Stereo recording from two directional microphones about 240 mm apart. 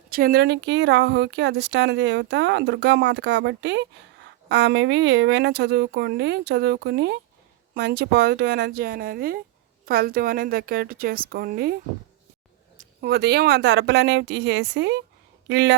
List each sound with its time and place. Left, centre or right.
0.1 s a woman's voice: right
12.7 s a woman's voice: right